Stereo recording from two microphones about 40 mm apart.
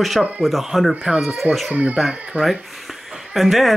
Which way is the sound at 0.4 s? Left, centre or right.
Centre.